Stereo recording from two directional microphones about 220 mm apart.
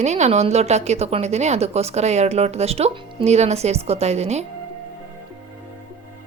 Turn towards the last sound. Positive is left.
turn(degrees=-30)  # may be behind; listen again after turning